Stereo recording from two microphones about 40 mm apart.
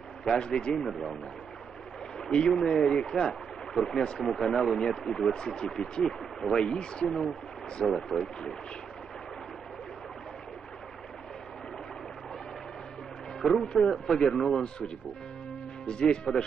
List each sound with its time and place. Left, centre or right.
0.4 s speech: left
2.1 s speech: centre
4.2 s speech: centre
7.8 s speech: centre
13.4 s speech: centre
15.9 s speech: left